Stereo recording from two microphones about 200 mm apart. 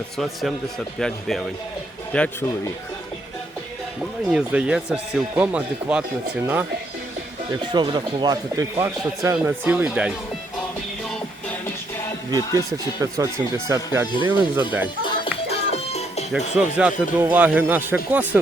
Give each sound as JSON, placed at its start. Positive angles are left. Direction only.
{"t": 0.9, "sound": "speech", "side_deg": 0}
{"t": 4.3, "sound": "speech", "side_deg": -5}
{"t": 7.5, "sound": "speech", "side_deg": -20}
{"t": 12.5, "sound": "speech", "side_deg": -15}
{"t": 15.4, "sound": "music", "side_deg": 30}
{"t": 16.3, "sound": "speech", "side_deg": -5}